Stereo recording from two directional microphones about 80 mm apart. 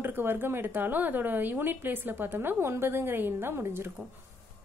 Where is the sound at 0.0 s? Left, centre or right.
Right.